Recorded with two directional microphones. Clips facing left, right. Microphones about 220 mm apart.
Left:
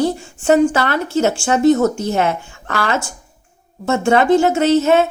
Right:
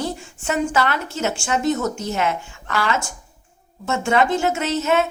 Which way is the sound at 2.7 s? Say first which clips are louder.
Left 2 dB; 55° left (ahead or behind).